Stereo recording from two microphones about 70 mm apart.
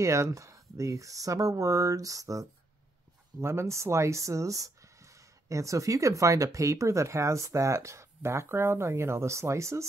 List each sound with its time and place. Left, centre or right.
0.0 s speech: right
3.3 s speech: right